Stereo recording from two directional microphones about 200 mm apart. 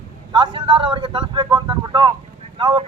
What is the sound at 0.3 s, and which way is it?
A man's voice, 25° right (ahead or behind).